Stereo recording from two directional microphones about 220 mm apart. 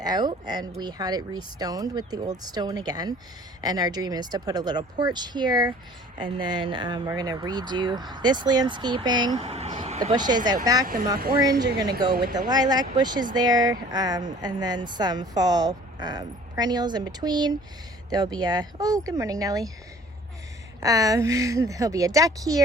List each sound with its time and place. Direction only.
0.0 s speech: 20° right (ahead or behind)
10.8 s speech: 40° right (ahead or behind)
11.6 s speech: 15° right (ahead or behind)
20.8 s speech: 15° right (ahead or behind)